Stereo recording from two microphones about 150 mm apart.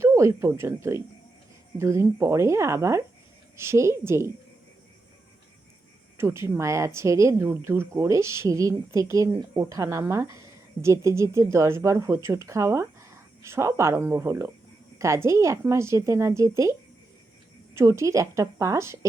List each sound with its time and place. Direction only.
0.0 s a woman's voice: 20° right (ahead or behind)
6.1 s speech: 20° right (ahead or behind)
17.7 s speech: 20° right (ahead or behind)